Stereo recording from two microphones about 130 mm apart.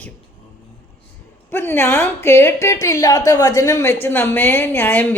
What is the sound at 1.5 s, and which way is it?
A woman's voice, 15° left (ahead or behind).